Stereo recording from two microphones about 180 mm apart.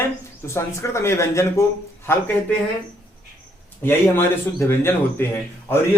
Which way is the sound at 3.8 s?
10° left (ahead or behind).